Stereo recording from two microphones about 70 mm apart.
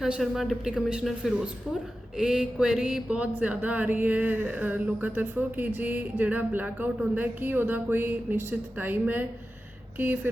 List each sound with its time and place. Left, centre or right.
0.2 s speech: centre; by 9.2 s right